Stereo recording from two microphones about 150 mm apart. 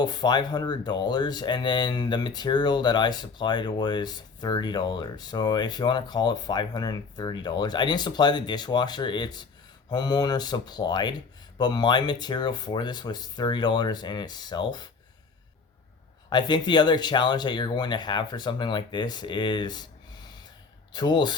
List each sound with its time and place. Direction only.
0.0 s speech: 30° left (ahead or behind)
16.3 s speech: 30° left (ahead or behind)
20.9 s speech: 30° left (ahead or behind)